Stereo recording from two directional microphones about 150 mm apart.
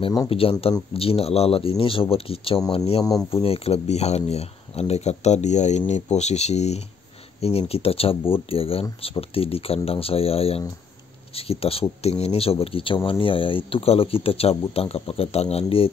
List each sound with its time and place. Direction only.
0.3 s speech: 40° left (ahead or behind)